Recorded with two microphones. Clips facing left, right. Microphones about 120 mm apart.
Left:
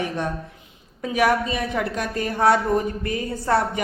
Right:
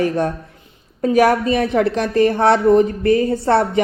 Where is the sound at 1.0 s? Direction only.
40° right (ahead or behind).